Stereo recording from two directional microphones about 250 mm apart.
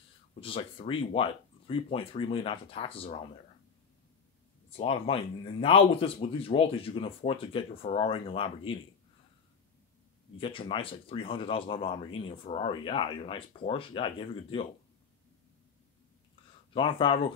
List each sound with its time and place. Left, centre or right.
0.4 s speech: left
4.6 s speech: left
10.3 s speech: left
16.7 s speech: left